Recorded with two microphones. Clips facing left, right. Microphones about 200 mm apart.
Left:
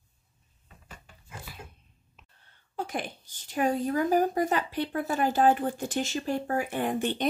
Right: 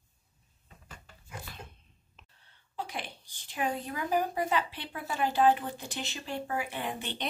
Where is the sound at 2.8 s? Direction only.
45° left (ahead or behind).